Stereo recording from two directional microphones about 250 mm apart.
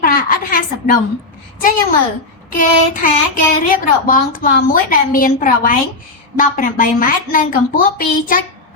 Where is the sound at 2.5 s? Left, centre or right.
Left.